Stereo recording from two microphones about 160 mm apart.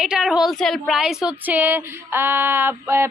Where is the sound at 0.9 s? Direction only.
5° right (ahead or behind).